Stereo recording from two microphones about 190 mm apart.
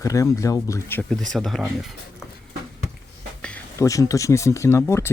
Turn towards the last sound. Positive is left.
turn(degrees=15)  # may be behind; listen again after turning